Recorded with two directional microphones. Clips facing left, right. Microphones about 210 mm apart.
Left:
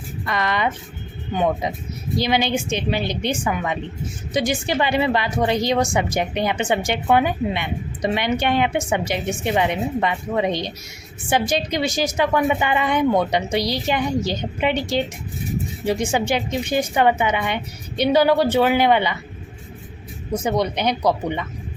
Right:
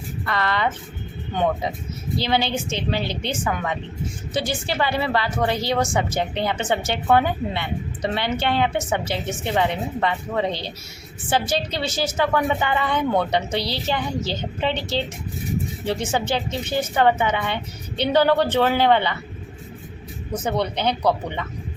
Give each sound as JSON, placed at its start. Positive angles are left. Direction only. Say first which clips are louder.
{"t": 0.3, "sound": "a woman's voice", "louder": "left 1 dB", "side_deg": 15}
{"t": 2.1, "sound": "a woman's voice", "louder": "left 2 dB", "side_deg": 15}
{"t": 20.3, "sound": "a woman's voice", "louder": "left 3 dB", "side_deg": 10}